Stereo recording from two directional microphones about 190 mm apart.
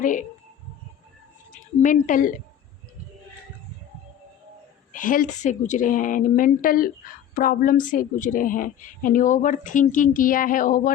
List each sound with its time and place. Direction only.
0.0 s a woman's voice: 45° left (ahead or behind)
1.8 s a woman's voice: 45° left (ahead or behind)
4.9 s a woman's voice: 45° left (ahead or behind)